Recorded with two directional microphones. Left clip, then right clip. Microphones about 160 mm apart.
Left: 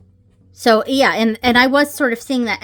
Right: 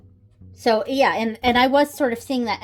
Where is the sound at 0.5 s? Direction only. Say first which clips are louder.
Left 5 dB; 45° left (ahead or behind); by 2.6 s 25° left (ahead or behind).